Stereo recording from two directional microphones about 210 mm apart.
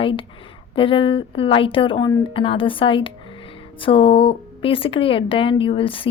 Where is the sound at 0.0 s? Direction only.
25° left (ahead or behind).